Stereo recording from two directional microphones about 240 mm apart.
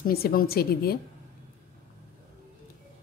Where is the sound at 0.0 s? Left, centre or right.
Left.